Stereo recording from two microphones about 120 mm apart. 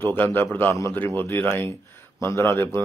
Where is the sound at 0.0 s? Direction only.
20° left (ahead or behind).